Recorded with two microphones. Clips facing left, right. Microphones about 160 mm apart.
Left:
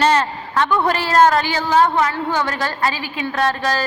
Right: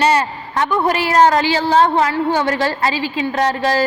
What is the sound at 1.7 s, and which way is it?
A woman's voice, 30° right (ahead or behind).